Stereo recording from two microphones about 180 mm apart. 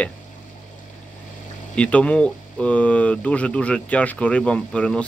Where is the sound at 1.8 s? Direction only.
5° left (ahead or behind).